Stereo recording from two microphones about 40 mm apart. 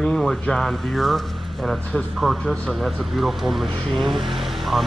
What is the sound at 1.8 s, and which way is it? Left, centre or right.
Speech, left.